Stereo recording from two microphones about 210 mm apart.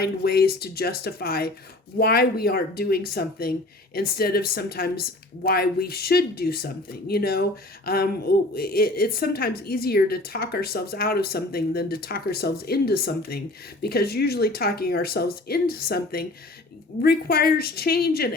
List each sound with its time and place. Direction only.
0.0 s a woman's voice: 50° left (ahead or behind)